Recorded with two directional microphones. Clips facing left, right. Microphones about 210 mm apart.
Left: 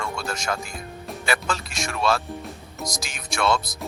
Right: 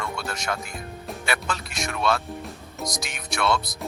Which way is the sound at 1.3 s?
30° left (ahead or behind).